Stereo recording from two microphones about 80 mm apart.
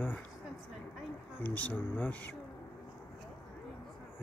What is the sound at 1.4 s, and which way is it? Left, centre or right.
Speech, left.